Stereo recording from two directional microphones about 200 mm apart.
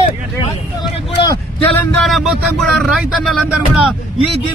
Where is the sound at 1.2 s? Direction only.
15° left (ahead or behind).